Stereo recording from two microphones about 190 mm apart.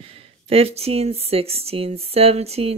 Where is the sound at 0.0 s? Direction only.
30° right (ahead or behind).